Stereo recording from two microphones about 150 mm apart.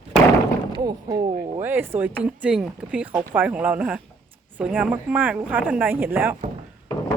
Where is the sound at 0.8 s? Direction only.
25° right (ahead or behind).